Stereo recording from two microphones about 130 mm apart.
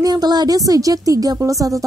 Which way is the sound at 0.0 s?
30° right (ahead or behind).